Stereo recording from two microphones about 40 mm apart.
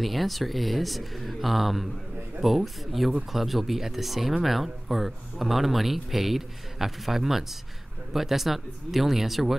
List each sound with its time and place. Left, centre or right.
0.0 s speech: centre